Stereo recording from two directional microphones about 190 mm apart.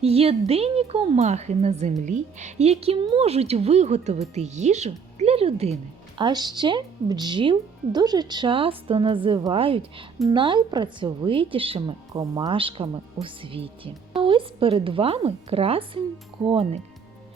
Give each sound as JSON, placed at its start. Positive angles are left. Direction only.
{"t": 0.0, "sound": "speech", "side_deg": -30}
{"t": 6.1, "sound": "a woman's voice", "side_deg": -20}